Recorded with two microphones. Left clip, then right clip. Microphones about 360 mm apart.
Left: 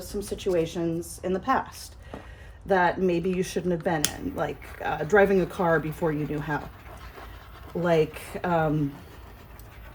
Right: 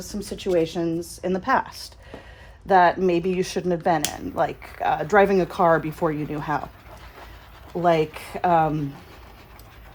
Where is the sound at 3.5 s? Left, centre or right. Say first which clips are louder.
Right 5 dB; centre.